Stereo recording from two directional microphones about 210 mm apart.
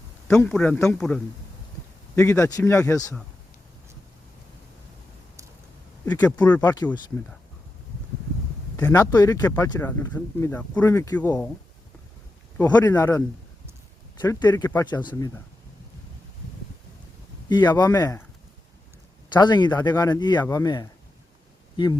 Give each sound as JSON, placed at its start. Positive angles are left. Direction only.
{"t": 0.3, "sound": "a man's voice", "side_deg": 5}
{"t": 2.1, "sound": "speech", "side_deg": 15}
{"t": 6.1, "sound": "speech", "side_deg": 5}
{"t": 6.6, "sound": "speech", "side_deg": 20}
{"t": 8.7, "sound": "speech", "side_deg": 10}
{"t": 12.5, "sound": "speech", "side_deg": 10}
{"t": 17.5, "sound": "speech", "side_deg": 20}
{"t": 19.3, "sound": "speech", "side_deg": 20}